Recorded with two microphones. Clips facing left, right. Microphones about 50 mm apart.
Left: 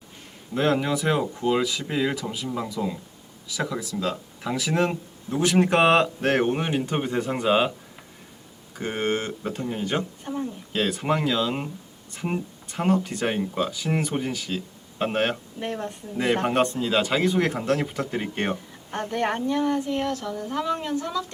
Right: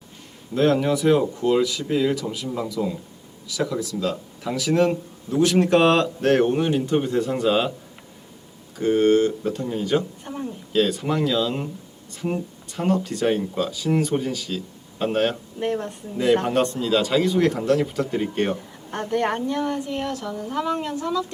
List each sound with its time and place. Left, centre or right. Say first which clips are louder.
0.5 s speech: right 3 dB; centre
8.8 s speech: right 9 dB; centre
10.2 s a sound: left 1 dB; centre
10.7 s speech: right 3 dB; left
15.5 s speech: right 6 dB; centre
16.2 s speech: right 3 dB; centre
18.5 s a woman's voice: right 1 dB; centre
19.6 s speech: left 1 dB; centre